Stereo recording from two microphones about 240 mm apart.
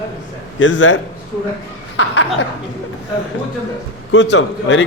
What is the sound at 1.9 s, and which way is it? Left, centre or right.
Chuckle, left.